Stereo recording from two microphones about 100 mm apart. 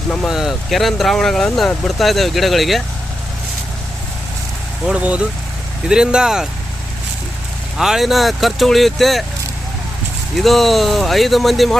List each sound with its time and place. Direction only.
0.3 s speech: 5° right (ahead or behind)
4.9 s speech: 15° right (ahead or behind)
7.8 s speech: 5° right (ahead or behind)
10.3 s speech: centre (ahead or behind)